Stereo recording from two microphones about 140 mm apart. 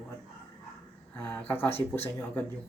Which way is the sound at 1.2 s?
10° left (ahead or behind).